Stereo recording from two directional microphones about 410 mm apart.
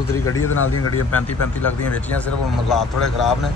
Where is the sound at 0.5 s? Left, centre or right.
Left.